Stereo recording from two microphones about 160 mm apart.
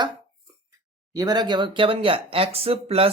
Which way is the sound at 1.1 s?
25° right (ahead or behind).